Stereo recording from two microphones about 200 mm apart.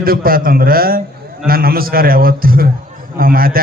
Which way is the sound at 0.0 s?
45° right (ahead or behind).